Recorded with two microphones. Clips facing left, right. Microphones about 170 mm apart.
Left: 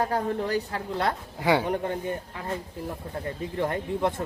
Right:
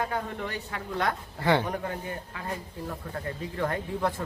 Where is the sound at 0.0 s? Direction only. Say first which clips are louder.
Left 5 dB; 35° left (ahead or behind).